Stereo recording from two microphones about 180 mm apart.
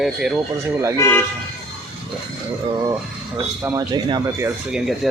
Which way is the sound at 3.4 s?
15° right (ahead or behind).